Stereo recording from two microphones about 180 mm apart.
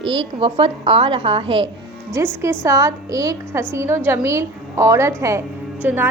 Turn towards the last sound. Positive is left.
turn(degrees=-10)  # may be behind; listen again after turning